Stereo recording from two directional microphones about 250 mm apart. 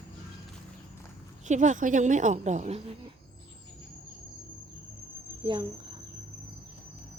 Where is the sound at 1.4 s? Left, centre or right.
Right.